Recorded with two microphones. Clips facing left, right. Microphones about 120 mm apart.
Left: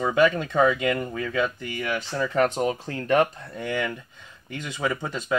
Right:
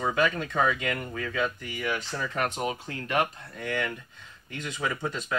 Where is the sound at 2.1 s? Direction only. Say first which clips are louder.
Left 7 dB; 30° left (ahead or behind).